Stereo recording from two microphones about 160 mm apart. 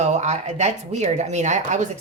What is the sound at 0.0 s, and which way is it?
Speech, 45° right (ahead or behind).